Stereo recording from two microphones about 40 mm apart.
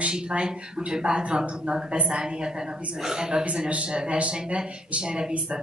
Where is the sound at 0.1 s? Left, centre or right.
Right.